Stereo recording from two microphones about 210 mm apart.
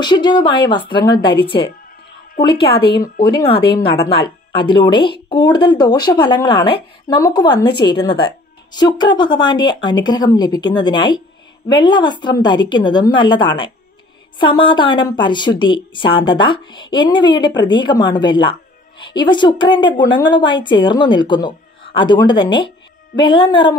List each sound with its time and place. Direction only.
0.0 s a woman's voice: 20° left (ahead or behind)
2.6 s speech: 50° left (ahead or behind)
3.3 s a woman's voice: 25° left (ahead or behind)